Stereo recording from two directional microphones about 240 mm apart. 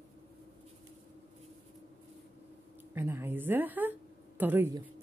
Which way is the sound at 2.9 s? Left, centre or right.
Centre.